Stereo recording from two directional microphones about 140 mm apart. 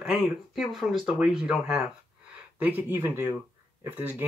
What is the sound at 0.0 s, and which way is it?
Speech, 5° right (ahead or behind).